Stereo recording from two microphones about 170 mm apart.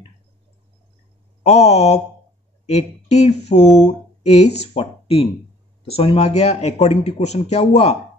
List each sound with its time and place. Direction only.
1.4 s speech: 40° left (ahead or behind)